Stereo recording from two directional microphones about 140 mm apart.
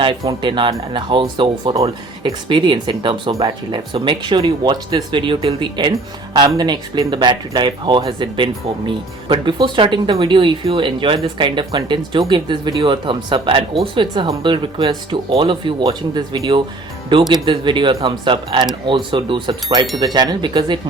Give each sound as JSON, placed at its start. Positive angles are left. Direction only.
{"t": 0.3, "sound": "speech", "side_deg": -35}